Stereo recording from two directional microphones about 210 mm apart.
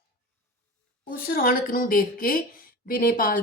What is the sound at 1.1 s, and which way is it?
A woman's voice, 45° left (ahead or behind).